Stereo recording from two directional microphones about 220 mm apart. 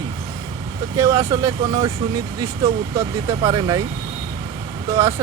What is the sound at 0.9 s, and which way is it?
Speech, 15° right (ahead or behind).